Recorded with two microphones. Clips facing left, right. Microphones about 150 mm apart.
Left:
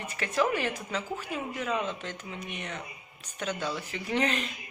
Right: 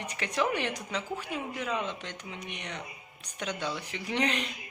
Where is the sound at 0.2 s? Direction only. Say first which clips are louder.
Left 2 dB; 20° right (ahead or behind).